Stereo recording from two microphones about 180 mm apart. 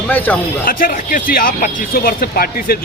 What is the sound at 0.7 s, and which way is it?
Speech, 50° left (ahead or behind).